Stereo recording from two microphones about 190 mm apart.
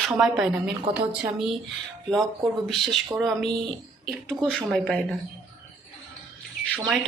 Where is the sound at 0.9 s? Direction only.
30° right (ahead or behind).